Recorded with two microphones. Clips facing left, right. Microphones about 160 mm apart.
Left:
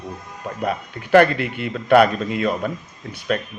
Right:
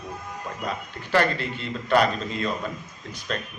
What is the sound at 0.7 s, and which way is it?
Speech, 60° left (ahead or behind).